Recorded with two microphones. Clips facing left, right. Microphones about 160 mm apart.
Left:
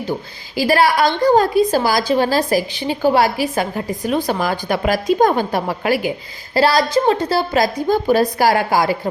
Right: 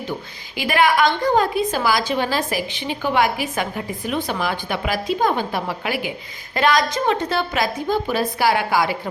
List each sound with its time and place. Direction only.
0.1 s a woman's voice: 35° left (ahead or behind)